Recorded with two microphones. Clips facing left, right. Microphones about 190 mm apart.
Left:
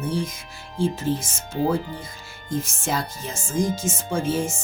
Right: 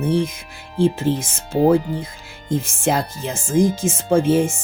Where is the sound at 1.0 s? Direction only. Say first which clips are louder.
Right 4 dB; 60° right (ahead or behind).